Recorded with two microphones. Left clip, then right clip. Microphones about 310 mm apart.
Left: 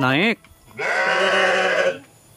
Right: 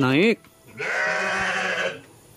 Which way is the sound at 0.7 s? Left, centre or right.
Left.